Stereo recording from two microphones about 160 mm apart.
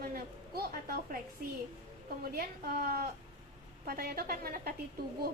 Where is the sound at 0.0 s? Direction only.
70° right (ahead or behind).